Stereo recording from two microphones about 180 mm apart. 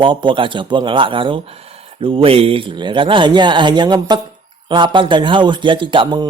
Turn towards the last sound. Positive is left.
turn(degrees=-25)  # may be behind; listen again after turning